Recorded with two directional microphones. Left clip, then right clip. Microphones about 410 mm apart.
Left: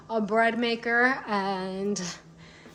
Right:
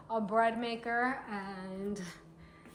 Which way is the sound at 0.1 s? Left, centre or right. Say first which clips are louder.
Left 6 dB; centre.